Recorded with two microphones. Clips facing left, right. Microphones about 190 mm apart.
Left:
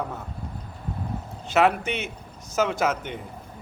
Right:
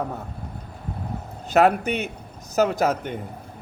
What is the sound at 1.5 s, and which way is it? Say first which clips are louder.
A man's voice: right 3 dB; 40° right (ahead or behind).